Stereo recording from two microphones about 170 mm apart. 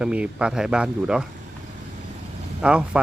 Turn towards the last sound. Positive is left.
turn(degrees=-5)  # may be behind; listen again after turning